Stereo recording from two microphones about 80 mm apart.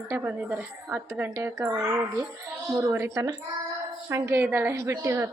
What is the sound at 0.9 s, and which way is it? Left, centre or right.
Speech, right.